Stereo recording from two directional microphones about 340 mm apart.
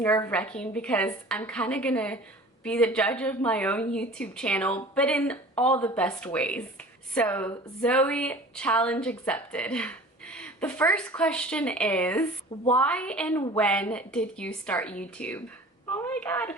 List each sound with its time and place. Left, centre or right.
0.0 s a woman's voice: centre